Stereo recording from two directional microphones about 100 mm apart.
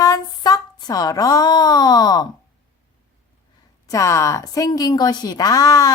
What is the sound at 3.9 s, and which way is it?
Speech, 30° left (ahead or behind).